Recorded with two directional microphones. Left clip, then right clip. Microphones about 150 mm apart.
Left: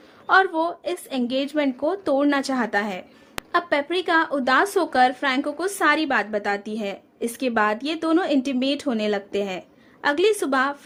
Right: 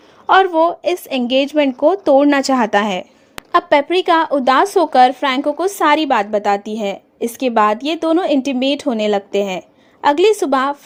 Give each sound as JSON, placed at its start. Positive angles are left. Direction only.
{"t": 0.3, "sound": "speech", "side_deg": -40}
{"t": 3.5, "sound": "speech", "side_deg": -35}